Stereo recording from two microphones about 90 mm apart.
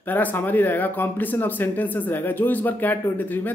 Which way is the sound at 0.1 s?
20° left (ahead or behind).